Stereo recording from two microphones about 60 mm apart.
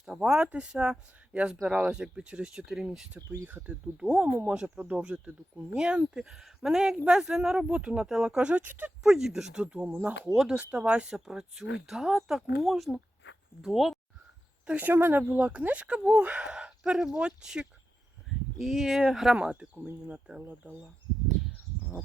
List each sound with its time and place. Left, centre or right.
0.2 s speech: centre
3.4 s speech: right
3.9 s speech: centre
4.2 s speech: right
4.4 s speech: centre
10.6 s speech: right; by 14.0 s centre
14.8 s speech: right; by 19.4 s centre
19.4 s speech: centre